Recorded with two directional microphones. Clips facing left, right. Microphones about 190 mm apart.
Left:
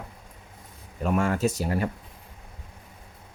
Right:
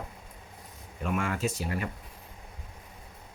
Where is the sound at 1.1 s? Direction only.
40° left (ahead or behind).